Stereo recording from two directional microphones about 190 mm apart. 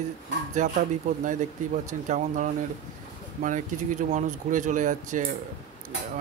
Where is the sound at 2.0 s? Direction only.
40° right (ahead or behind).